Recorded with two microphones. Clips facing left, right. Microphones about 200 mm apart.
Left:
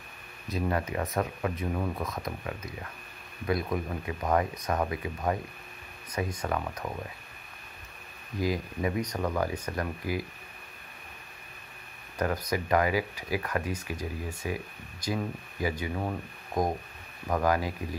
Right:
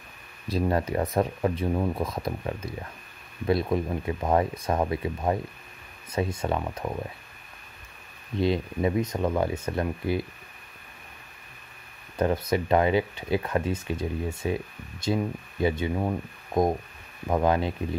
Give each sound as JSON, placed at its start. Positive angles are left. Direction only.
{"t": 0.5, "sound": "speech", "side_deg": -35}
{"t": 8.4, "sound": "speech", "side_deg": -25}
{"t": 12.2, "sound": "speech", "side_deg": -25}